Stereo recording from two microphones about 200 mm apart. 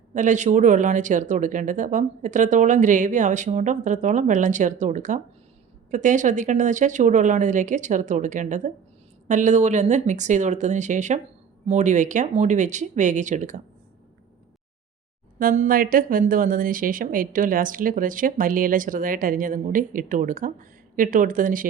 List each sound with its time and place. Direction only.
0.1 s speech: 40° right (ahead or behind)
15.4 s a woman's voice: 45° right (ahead or behind)